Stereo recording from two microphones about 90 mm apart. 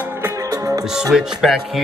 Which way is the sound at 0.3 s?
40° right (ahead or behind).